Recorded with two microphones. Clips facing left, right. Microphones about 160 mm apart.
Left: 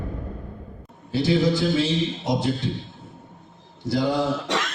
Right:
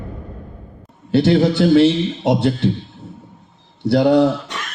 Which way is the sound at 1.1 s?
70° right (ahead or behind).